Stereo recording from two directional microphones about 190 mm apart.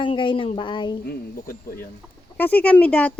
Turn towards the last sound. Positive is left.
turn(degrees=5)  # may be behind; listen again after turning